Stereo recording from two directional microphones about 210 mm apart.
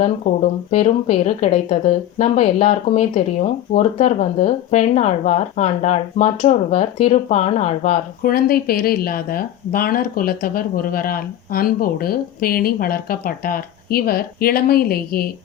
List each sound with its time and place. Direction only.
0.0 s speech: 35° left (ahead or behind)